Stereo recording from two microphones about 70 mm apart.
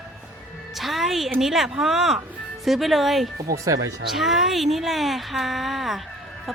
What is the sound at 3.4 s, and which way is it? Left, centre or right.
Speech, right.